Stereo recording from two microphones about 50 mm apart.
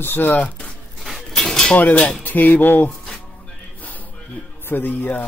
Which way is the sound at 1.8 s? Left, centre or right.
Left.